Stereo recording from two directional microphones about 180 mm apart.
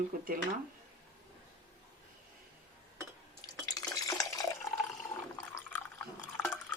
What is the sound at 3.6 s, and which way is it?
Water, 20° left (ahead or behind).